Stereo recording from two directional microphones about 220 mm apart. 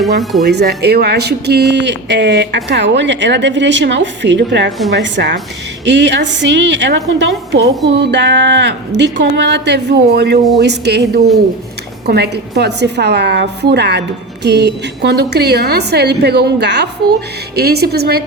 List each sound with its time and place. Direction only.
0.2 s speech: centre (ahead or behind)
0.4 s speech: 45° right (ahead or behind)